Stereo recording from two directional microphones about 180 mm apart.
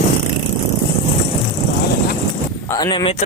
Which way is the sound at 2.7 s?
25° left (ahead or behind).